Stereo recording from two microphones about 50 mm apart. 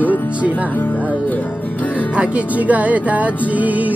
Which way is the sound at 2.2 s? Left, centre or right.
Right.